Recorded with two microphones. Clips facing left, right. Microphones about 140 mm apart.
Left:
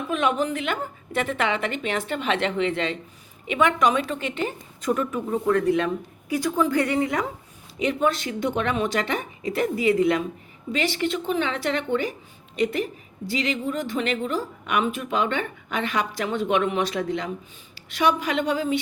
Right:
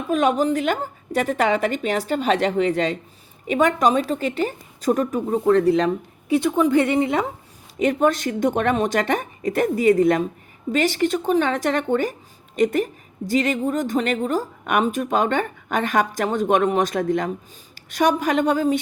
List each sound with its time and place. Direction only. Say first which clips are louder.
0.1 s a woman's voice: right 5 dB; 40° right (ahead or behind)
7.8 s a woman's voice: right 4 dB; 50° right (ahead or behind)